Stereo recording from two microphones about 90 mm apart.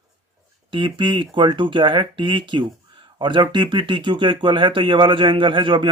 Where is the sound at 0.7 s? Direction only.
65° right (ahead or behind).